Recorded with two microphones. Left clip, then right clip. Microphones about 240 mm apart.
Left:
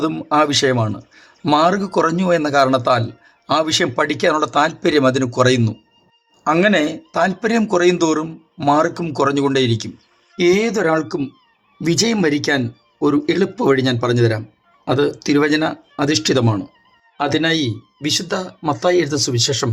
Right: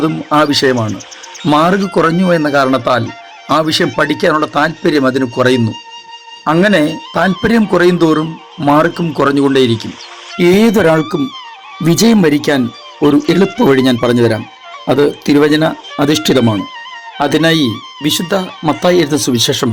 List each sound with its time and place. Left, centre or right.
0.0 s speech: centre